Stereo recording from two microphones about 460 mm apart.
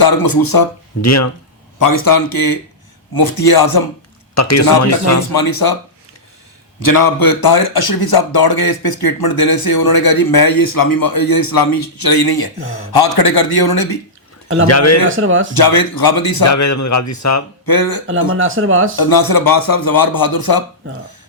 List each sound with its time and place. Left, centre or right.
0.0 s speech: left
4.4 s speech: left
5.3 s speech: left
6.7 s speech: left
14.7 s speech: left
15.1 s speech: right
15.5 s speech: left
16.4 s speech: left
17.7 s speech: left
18.3 s speech: right
18.9 s speech: left